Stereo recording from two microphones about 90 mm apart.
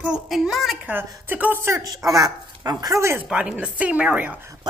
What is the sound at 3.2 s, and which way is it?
A woman's voice, 10° right (ahead or behind).